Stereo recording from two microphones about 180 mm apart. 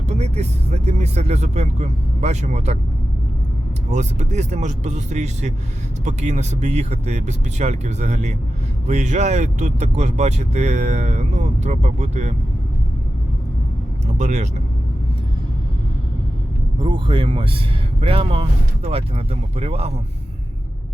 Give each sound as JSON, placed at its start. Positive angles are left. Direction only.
{"t": 0.0, "sound": "speech", "side_deg": -40}
{"t": 3.8, "sound": "speech", "side_deg": -40}
{"t": 14.2, "sound": "speech", "side_deg": -40}
{"t": 16.8, "sound": "speech", "side_deg": -30}